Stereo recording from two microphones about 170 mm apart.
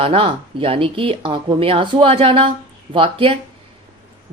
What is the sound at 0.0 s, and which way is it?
A woman's voice, 30° right (ahead or behind).